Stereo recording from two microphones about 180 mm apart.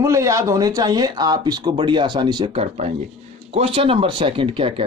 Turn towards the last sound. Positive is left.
turn(degrees=-30)  # may be behind; listen again after turning